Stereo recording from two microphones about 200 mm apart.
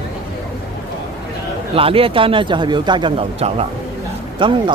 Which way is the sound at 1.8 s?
25° right (ahead or behind).